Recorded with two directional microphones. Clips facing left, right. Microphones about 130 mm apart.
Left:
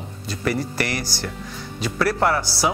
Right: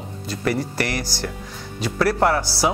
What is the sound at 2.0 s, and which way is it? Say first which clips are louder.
Speech: right 2 dB; 30° right (ahead or behind).